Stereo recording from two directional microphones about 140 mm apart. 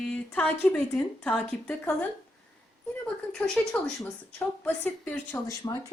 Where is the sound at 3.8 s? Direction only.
10° left (ahead or behind).